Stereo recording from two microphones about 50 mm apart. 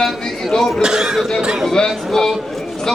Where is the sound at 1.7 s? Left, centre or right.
Centre.